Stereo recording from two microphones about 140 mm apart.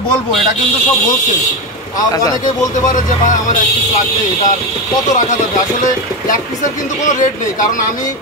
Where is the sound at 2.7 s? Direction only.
65° left (ahead or behind).